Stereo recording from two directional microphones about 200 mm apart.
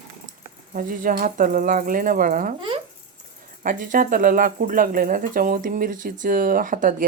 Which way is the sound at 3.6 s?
45° right (ahead or behind).